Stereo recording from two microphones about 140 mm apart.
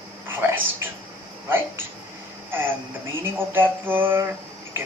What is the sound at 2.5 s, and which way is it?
Mantra, 15° right (ahead or behind).